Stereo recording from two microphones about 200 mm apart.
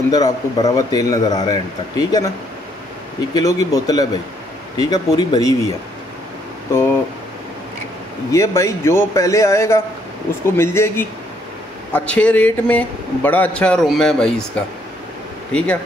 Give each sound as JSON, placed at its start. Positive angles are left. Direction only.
{"t": 0.1, "sound": "a man's voice", "side_deg": 20}
{"t": 3.3, "sound": "a man's voice", "side_deg": 15}
{"t": 8.3, "sound": "a man's voice", "side_deg": 15}